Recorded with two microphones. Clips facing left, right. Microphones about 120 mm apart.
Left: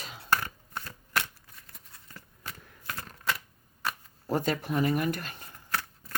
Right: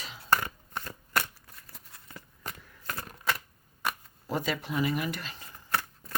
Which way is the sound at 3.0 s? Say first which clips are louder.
Right 1 dB; 5° right (ahead or behind).